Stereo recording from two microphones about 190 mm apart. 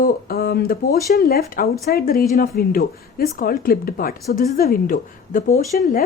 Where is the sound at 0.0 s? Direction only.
55° left (ahead or behind).